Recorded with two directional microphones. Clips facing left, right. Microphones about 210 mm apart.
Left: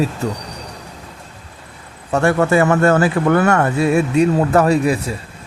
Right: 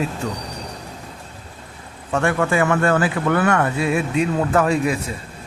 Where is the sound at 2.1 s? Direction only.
40° left (ahead or behind).